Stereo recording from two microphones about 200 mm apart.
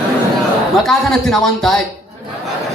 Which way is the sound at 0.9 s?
Centre (ahead or behind).